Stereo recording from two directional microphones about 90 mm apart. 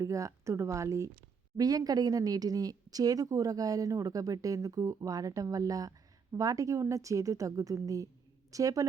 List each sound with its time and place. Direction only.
0.0 s a woman's voice: 35° right (ahead or behind)